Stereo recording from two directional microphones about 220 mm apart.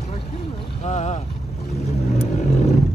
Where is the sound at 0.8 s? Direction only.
30° left (ahead or behind).